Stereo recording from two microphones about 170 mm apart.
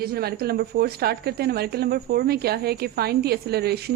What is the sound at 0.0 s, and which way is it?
A woman's voice, 65° right (ahead or behind).